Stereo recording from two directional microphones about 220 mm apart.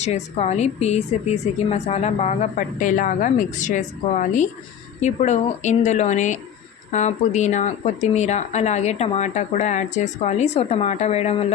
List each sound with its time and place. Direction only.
0.0 s speech: 30° left (ahead or behind)